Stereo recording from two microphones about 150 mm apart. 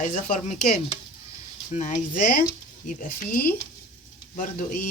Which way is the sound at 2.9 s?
65° left (ahead or behind).